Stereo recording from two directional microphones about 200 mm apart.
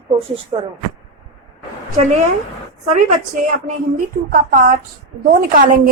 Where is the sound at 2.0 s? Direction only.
35° right (ahead or behind).